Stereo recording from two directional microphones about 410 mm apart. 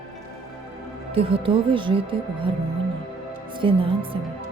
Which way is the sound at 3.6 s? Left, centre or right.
Centre.